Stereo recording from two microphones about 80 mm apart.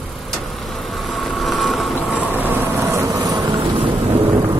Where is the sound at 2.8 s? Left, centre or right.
Right.